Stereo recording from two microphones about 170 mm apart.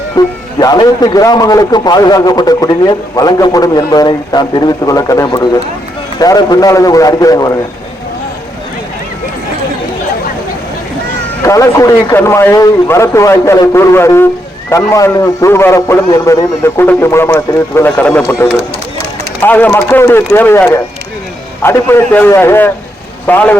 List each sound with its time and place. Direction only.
0.2 s a man's voice: 20° left (ahead or behind)
11.4 s a man's voice: 20° left (ahead or behind)